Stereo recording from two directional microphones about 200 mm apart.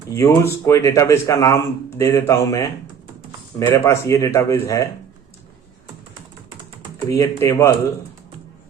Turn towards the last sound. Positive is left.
turn(degrees=15)  # may be behind; listen again after turning